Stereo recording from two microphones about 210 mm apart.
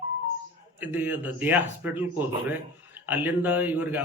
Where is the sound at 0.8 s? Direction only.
10° right (ahead or behind).